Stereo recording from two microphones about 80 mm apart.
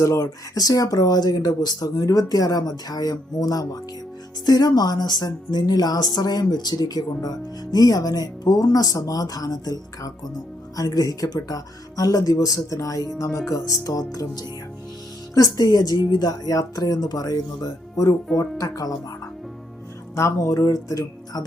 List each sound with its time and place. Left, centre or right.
0.0 s speech: left
10.8 s speech: left
20.1 s speech: left